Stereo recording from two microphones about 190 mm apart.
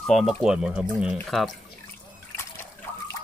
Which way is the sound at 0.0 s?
Centre (ahead or behind).